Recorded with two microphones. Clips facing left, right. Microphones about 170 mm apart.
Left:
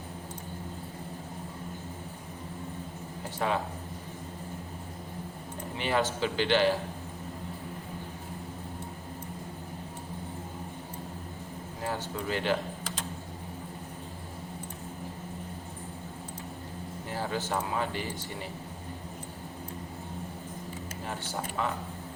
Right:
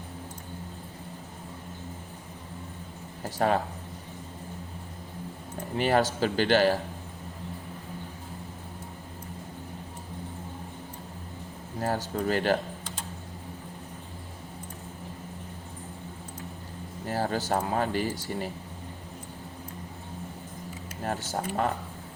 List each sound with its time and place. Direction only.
3.2 s a man's voice: 45° right (ahead or behind)
5.7 s a man's voice: 45° right (ahead or behind)
11.8 s a man's voice: 40° right (ahead or behind)
17.1 s speech: 40° right (ahead or behind)
21.0 s a man's voice: 50° right (ahead or behind)